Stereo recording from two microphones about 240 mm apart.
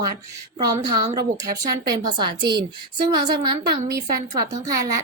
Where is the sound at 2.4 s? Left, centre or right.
Right.